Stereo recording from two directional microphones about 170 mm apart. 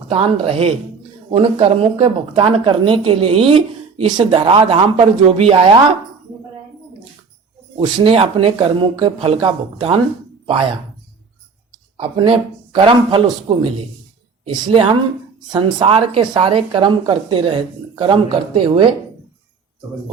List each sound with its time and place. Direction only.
0.1 s speech: 35° right (ahead or behind)
7.8 s speech: 30° right (ahead or behind)
11.9 s a woman's voice: 30° right (ahead or behind)